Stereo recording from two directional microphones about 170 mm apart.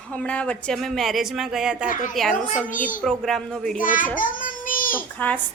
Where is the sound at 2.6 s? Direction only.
50° left (ahead or behind).